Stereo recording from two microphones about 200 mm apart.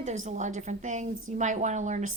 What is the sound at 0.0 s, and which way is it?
Speech, 35° right (ahead or behind).